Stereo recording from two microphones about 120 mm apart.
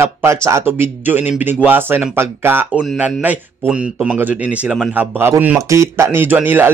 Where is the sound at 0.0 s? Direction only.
20° right (ahead or behind).